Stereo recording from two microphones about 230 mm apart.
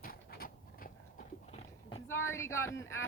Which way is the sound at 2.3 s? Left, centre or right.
Centre.